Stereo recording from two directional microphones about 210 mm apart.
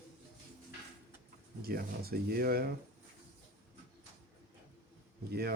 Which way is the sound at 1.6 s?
45° right (ahead or behind).